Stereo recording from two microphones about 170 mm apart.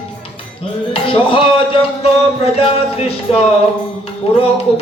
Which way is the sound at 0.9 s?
30° left (ahead or behind).